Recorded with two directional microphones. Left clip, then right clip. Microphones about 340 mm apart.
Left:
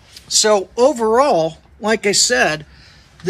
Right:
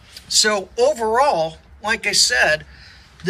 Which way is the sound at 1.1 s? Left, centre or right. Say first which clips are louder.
Left 3 dB; centre.